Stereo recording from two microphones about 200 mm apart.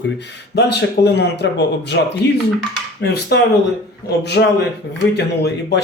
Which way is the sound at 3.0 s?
55° left (ahead or behind).